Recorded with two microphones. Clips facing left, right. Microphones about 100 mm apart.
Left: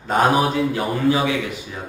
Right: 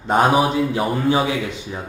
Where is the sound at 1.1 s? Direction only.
30° right (ahead or behind).